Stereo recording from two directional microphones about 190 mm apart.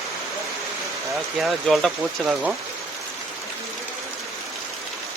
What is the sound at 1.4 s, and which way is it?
Speech, centre (ahead or behind).